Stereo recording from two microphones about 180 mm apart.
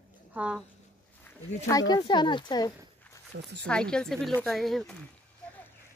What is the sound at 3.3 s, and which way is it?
Speech, 75° right (ahead or behind).